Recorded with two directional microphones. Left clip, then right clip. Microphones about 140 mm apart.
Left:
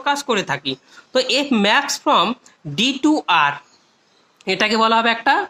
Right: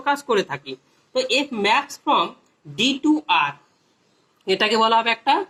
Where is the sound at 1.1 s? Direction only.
65° left (ahead or behind).